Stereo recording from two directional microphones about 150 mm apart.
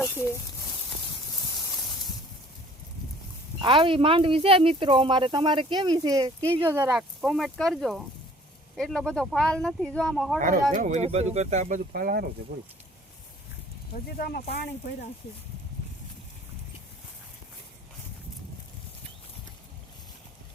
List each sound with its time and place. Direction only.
0.0 s a sound: 15° left (ahead or behind)
3.6 s speech: 35° right (ahead or behind)
6.5 s speech: 15° right (ahead or behind)
7.2 s speech: centre (ahead or behind)
10.4 s speech: 60° right (ahead or behind); by 12.2 s 75° right (ahead or behind)
14.2 s speech: 90° left